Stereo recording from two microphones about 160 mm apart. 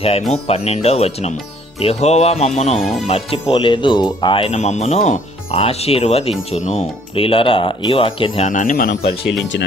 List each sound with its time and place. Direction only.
0.0 s speech: 40° left (ahead or behind)
8.4 s speech: 55° left (ahead or behind); by 9.1 s 75° left (ahead or behind)